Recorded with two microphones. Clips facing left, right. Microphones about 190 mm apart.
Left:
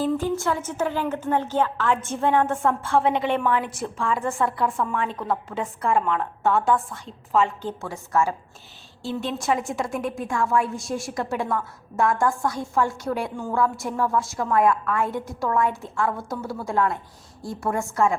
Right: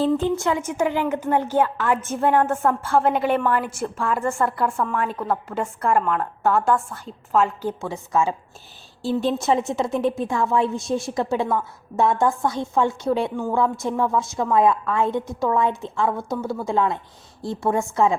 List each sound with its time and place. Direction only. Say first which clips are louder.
0.0 s a woman's voice: right 3 dB; 25° right (ahead or behind); by 7.7 s 5° right (ahead or behind)
7.7 s a woman's voice: right 2 dB; 15° right (ahead or behind)
9.0 s a woman's voice: right 5 dB; 30° right (ahead or behind)